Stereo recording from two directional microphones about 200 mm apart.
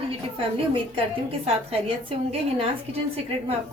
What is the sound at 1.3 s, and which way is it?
A woman's voice, 30° right (ahead or behind).